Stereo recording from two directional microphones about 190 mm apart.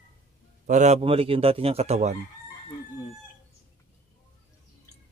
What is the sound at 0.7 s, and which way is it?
A man's voice, 35° right (ahead or behind).